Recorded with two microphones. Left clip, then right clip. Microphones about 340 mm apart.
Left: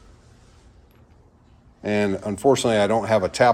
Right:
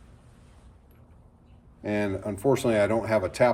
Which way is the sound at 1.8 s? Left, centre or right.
Left.